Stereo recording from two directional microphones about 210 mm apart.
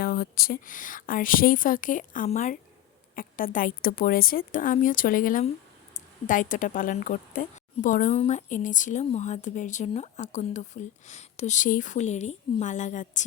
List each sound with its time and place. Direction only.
0.0 s a woman's voice: 45° left (ahead or behind)